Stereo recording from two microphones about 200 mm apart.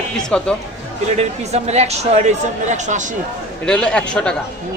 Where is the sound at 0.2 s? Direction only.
5° left (ahead or behind).